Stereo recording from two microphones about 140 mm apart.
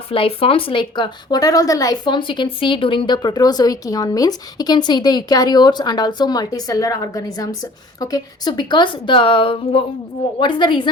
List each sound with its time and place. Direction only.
0.1 s a woman's voice: 40° left (ahead or behind)